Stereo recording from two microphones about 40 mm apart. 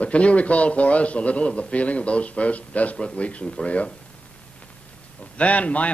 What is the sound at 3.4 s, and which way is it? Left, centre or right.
Speech, left.